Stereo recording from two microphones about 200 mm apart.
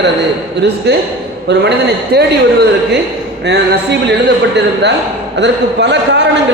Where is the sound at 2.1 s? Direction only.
55° right (ahead or behind).